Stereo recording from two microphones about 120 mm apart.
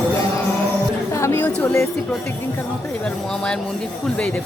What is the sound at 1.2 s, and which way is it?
Chatter, 20° left (ahead or behind).